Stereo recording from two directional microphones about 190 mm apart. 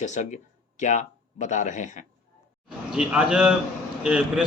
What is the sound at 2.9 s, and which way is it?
Speech, 5° right (ahead or behind).